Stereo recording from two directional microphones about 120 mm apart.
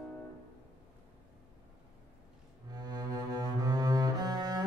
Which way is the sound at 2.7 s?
35° right (ahead or behind).